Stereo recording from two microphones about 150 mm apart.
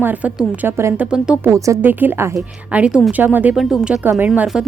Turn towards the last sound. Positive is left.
turn(degrees=-5)  # may be behind; listen again after turning